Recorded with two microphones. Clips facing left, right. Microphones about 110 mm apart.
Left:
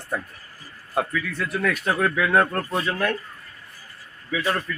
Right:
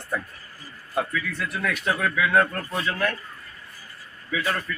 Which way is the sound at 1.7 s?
40° left (ahead or behind).